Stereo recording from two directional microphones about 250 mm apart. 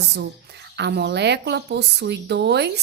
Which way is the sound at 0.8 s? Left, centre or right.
Right.